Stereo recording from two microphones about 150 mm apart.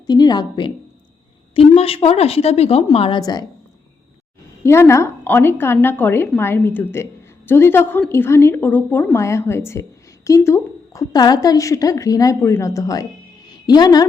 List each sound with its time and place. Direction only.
0.1 s a woman's voice: 25° left (ahead or behind)
1.5 s a woman's voice: 40° left (ahead or behind)
3.2 s a woman's voice: 25° left (ahead or behind)
4.6 s a woman's voice: 15° left (ahead or behind)